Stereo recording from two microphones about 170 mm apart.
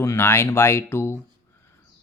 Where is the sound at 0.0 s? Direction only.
15° left (ahead or behind).